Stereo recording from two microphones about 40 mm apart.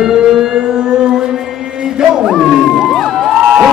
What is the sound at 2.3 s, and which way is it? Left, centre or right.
Speech, centre.